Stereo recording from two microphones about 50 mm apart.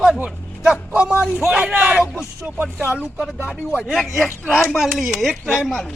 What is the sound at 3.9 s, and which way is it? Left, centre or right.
Speech, centre.